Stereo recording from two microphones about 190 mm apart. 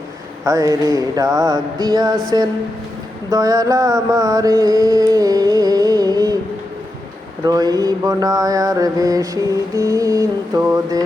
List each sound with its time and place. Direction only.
0.4 s mantra: 15° right (ahead or behind)
3.2 s mantra: 20° right (ahead or behind)
7.4 s mantra: 20° right (ahead or behind)